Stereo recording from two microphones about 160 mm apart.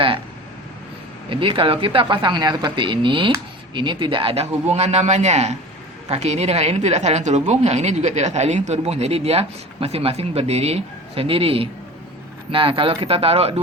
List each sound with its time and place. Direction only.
1.3 s speech: 35° right (ahead or behind)